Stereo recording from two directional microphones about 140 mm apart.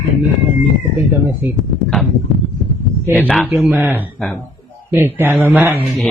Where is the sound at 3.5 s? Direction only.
15° right (ahead or behind).